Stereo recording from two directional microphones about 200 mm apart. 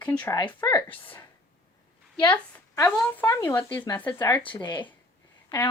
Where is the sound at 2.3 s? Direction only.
10° left (ahead or behind).